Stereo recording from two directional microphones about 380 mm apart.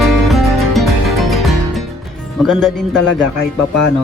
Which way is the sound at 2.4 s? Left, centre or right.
Centre.